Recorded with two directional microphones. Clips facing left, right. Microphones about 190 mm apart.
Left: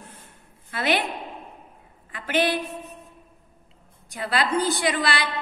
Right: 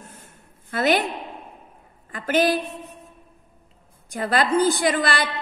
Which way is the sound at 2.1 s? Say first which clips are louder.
Right 3 dB; 45° right (ahead or behind).